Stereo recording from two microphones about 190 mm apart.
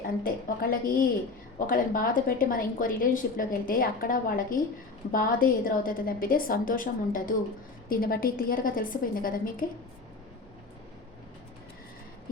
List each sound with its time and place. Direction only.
0.2 s a woman's voice: 50° left (ahead or behind)